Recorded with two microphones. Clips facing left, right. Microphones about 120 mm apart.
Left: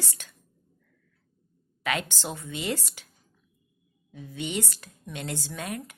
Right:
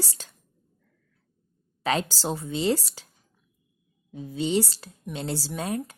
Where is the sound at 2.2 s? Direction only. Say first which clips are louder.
Right 7 dB; 25° right (ahead or behind).